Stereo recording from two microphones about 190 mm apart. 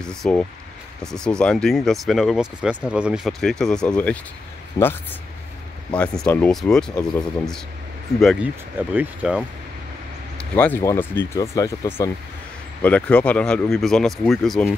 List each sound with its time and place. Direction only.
0.0 s speech: 5° left (ahead or behind)
4.8 s speech: 20° left (ahead or behind)
5.9 s speech: 5° left (ahead or behind)
8.7 s speech: 10° right (ahead or behind)
10.3 s speech: 10° left (ahead or behind)